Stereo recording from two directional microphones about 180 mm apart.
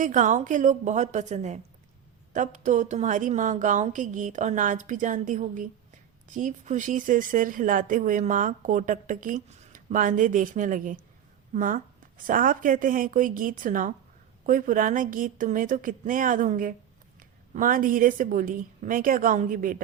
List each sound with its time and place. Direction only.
0.0 s speech: 45° right (ahead or behind)